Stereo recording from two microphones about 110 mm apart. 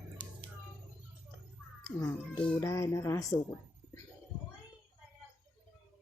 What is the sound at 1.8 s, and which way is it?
A woman's voice, 30° left (ahead or behind).